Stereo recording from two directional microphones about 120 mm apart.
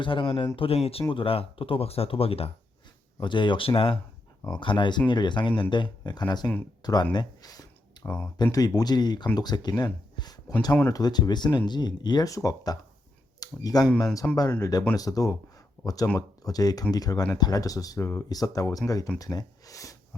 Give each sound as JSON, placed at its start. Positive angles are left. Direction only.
{"t": 0.0, "sound": "speech", "side_deg": 45}
{"t": 3.2, "sound": "speech", "side_deg": 40}
{"t": 8.0, "sound": "speech", "side_deg": 15}
{"t": 8.5, "sound": "speech", "side_deg": 35}
{"t": 14.2, "sound": "speech", "side_deg": 10}
{"t": 14.6, "sound": "speech", "side_deg": 30}